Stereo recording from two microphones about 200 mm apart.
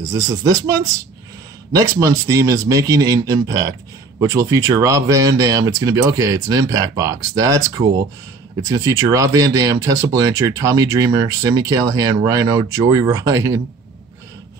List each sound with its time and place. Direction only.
0.3 s speech: 20° right (ahead or behind)